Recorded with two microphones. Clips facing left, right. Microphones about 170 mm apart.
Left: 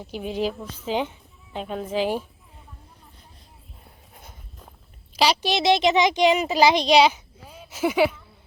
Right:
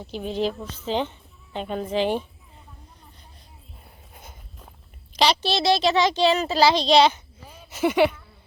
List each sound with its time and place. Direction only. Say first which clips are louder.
0.0 s a woman's voice: right 1 dB; 10° left (ahead or behind)
4.1 s walk: right 1 dB; centre (ahead or behind)
5.1 s speech: even; 10° left (ahead or behind)